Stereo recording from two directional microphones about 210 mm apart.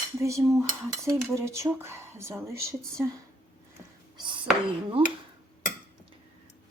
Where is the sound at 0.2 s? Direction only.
15° right (ahead or behind).